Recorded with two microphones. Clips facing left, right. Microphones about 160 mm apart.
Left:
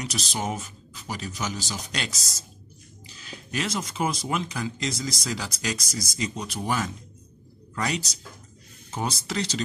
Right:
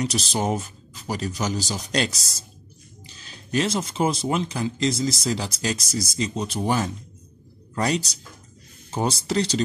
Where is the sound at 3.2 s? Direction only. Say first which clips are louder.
Right 7 dB; 35° right (ahead or behind).